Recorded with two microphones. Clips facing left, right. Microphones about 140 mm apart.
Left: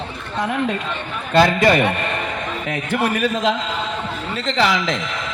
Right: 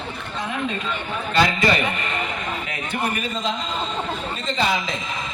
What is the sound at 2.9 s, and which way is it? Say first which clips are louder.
A man's voice: left 6 dB; 90° left.